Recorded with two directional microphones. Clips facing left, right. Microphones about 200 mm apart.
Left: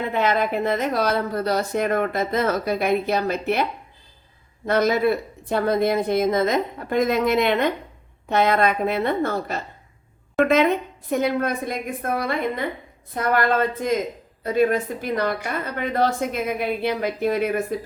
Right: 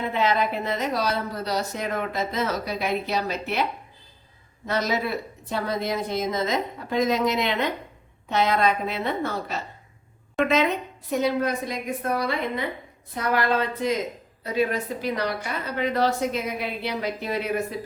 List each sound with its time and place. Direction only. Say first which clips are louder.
0.1 s a woman's voice: left 2 dB; 50° left (ahead or behind)